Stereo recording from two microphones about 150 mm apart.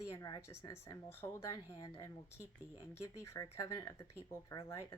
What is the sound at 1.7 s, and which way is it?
Speech, 25° left (ahead or behind).